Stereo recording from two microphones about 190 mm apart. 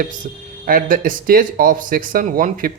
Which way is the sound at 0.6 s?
50° right (ahead or behind).